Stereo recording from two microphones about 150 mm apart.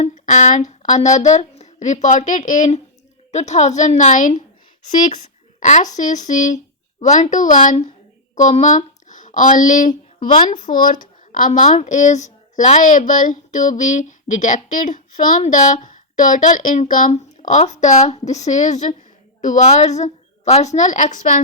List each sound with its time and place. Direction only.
0.0 s a woman's voice: 50° left (ahead or behind)